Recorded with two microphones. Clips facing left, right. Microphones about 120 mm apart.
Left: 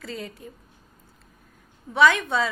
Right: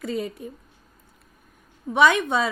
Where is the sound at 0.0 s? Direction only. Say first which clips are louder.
Right 7 dB; 20° right (ahead or behind).